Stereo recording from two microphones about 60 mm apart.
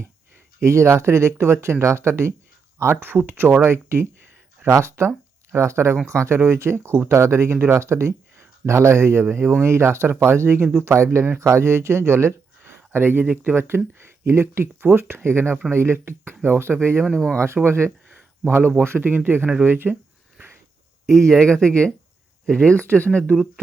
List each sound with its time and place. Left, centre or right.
0.6 s speech: right
13.6 s speech: right
17.3 s speech: right
18.1 s a sound: right
18.8 s speech: right
21.1 s speech: centre; by 23.2 s left